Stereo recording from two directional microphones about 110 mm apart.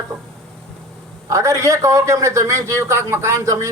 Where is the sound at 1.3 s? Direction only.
30° right (ahead or behind).